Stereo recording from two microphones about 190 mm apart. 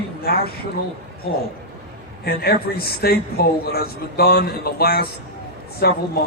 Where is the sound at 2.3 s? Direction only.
55° left (ahead or behind).